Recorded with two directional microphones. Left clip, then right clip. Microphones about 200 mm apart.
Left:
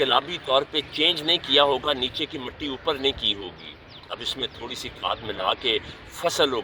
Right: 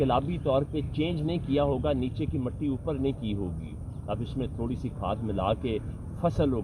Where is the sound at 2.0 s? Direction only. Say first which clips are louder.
Left 5 dB; 55° left (ahead or behind).